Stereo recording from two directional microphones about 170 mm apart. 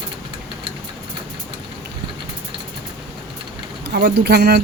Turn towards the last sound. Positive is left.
turn(degrees=-70)  # may be behind; listen again after turning